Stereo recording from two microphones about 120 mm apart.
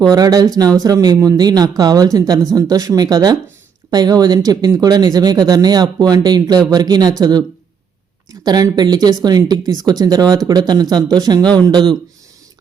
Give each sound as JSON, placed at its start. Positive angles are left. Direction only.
{"t": 0.1, "sound": "speech", "side_deg": -30}